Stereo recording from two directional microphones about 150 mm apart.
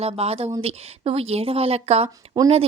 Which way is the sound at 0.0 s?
40° right (ahead or behind).